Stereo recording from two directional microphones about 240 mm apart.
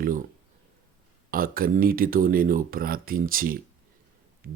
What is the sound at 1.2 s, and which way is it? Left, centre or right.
Speech, right.